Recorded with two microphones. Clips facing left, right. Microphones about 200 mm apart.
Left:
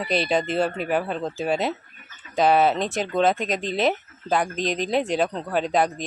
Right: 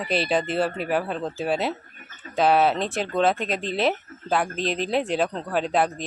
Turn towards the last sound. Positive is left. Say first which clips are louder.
# left 1 dB
turn(degrees=0)  # may be behind; listen again after turning